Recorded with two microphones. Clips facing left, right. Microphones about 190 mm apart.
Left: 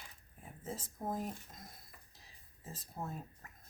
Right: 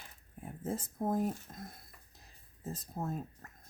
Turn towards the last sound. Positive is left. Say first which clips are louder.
# right 5 dB
turn(degrees=-25)  # may be behind; listen again after turning